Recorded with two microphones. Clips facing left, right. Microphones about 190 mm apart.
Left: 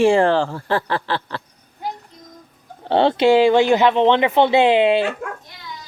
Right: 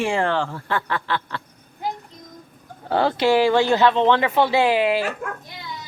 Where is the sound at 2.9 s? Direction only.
25° left (ahead or behind).